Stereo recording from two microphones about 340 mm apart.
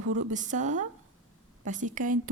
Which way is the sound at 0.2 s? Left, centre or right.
Right.